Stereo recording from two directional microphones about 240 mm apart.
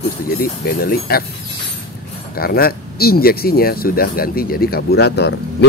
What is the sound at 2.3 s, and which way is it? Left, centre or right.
Speech, left.